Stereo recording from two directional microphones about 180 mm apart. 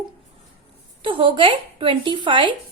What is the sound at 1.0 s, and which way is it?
A woman's voice, 30° right (ahead or behind).